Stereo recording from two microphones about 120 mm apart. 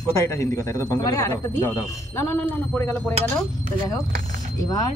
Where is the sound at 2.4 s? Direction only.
15° left (ahead or behind).